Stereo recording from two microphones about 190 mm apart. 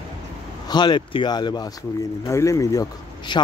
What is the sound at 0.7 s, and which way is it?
Speech, 25° left (ahead or behind).